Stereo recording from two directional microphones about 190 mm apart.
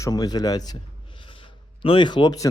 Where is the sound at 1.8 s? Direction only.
25° left (ahead or behind).